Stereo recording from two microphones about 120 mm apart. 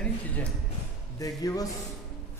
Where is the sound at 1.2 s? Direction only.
30° left (ahead or behind).